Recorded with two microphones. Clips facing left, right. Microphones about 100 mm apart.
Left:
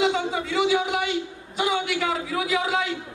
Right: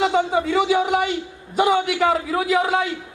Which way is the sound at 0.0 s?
45° right (ahead or behind).